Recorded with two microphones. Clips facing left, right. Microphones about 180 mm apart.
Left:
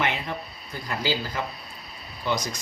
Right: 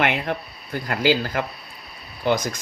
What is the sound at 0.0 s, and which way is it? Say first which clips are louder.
Speech: right 5 dB; 60° right (ahead or behind).